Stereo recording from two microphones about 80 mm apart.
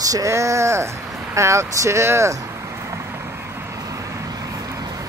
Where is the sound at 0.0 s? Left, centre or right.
Right.